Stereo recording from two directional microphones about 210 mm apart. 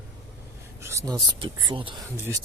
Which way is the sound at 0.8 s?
15° right (ahead or behind).